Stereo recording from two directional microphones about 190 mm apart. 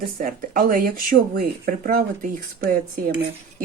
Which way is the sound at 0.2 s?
45° right (ahead or behind).